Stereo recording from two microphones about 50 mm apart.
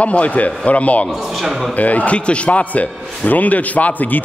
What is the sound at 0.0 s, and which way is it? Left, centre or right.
Speech, left.